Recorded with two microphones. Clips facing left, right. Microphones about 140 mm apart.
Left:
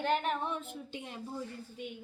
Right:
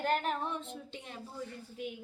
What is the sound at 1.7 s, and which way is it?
Speech, centre (ahead or behind).